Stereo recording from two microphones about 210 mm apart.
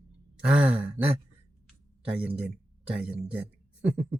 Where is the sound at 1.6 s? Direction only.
5° right (ahead or behind).